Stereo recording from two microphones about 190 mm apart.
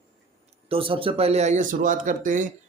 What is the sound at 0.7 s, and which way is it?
A man's voice, 30° right (ahead or behind).